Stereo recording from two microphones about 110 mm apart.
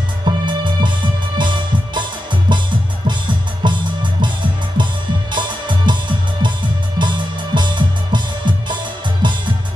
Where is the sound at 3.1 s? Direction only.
45° right (ahead or behind).